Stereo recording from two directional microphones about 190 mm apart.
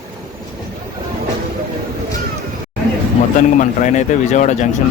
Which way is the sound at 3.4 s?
40° left (ahead or behind).